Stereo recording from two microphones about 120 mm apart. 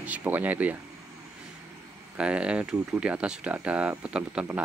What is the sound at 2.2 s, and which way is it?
Speech, 10° right (ahead or behind).